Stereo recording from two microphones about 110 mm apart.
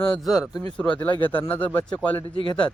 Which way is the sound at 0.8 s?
10° left (ahead or behind).